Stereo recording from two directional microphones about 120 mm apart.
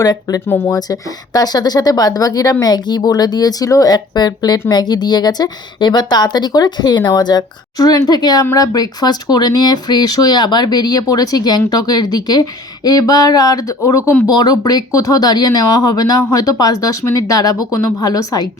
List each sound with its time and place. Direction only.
0.0 s a woman's voice: 30° left (ahead or behind)